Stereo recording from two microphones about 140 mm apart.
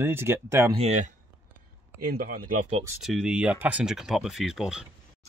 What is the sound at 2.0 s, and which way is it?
Speech, 90° right.